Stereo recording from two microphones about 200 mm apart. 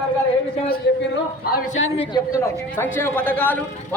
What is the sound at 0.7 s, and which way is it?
Speech, 55° left (ahead or behind).